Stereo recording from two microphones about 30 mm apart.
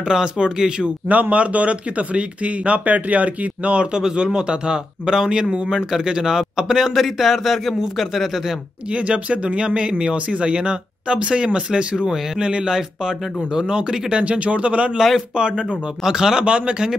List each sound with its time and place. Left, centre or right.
0.0 s speech: right
1.0 s speech: right
5.8 s a man's voice: centre
8.9 s speech: right
10.1 s speech: right
12.7 s speech: right
14.3 s speech: right
15.3 s speech: right
16.0 s speech: centre
16.4 s speech: right